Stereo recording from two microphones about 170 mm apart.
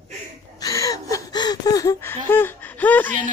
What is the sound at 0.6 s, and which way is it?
Gasp, 20° left (ahead or behind).